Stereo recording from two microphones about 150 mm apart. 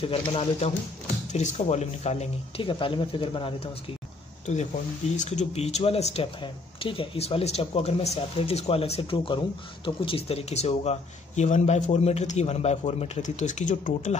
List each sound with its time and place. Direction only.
0.0 s speech: 40° left (ahead or behind)
5.1 s speech: 50° left (ahead or behind)